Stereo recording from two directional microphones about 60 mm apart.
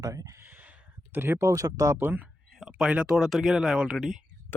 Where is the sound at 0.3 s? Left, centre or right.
Right.